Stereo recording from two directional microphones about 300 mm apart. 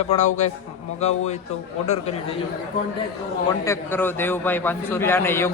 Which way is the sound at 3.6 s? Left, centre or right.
Centre.